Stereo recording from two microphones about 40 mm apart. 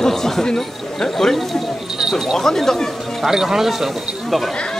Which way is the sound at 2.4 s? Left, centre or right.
Centre.